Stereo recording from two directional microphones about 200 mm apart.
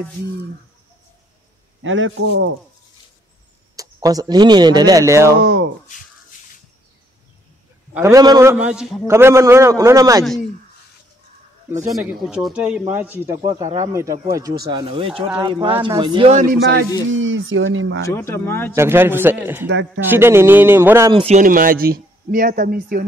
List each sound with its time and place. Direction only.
1.8 s speech: 75° right (ahead or behind)
3.7 s speech: 20° right (ahead or behind)
5.4 s a sound: 65° right (ahead or behind)
7.9 s a man's voice: 15° right (ahead or behind)
10.2 s speech: centre (ahead or behind)
12.0 s a man's voice: 5° right (ahead or behind); by 16.4 s 30° right (ahead or behind)
17.1 s speech: 75° right (ahead or behind)
18.0 s speech: 10° left (ahead or behind)
18.8 s a man's voice: 10° right (ahead or behind)
21.1 s speech: 30° right (ahead or behind); by 23.0 s 45° right (ahead or behind)